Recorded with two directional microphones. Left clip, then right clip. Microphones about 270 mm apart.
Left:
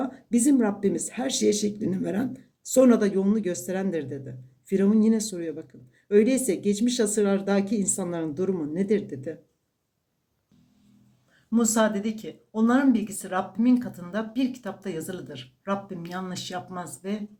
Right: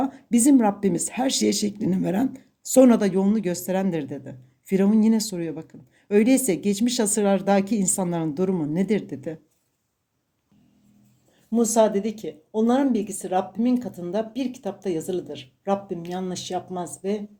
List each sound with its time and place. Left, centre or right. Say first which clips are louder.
0.0 s speech: right 3 dB; right
11.5 s speech: right 4 dB; right